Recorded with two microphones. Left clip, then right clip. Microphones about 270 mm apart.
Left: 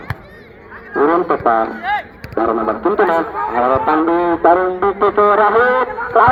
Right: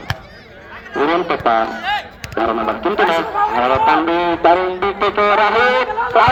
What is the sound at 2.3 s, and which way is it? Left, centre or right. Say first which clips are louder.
A man's voice: left 1 dB; right.